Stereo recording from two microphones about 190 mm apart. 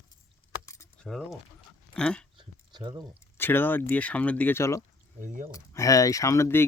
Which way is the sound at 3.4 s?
10° left (ahead or behind).